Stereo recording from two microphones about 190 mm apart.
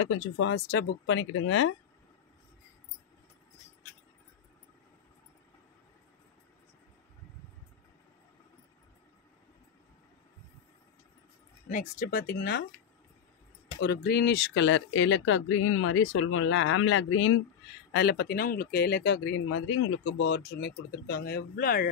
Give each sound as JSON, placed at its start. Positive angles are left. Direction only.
{"t": 0.0, "sound": "speech", "side_deg": 80}
{"t": 11.7, "sound": "speech", "side_deg": 45}
{"t": 13.7, "sound": "speech", "side_deg": 60}
{"t": 17.9, "sound": "speech", "side_deg": 55}